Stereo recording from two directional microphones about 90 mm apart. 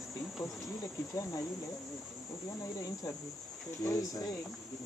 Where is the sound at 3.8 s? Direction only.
40° left (ahead or behind).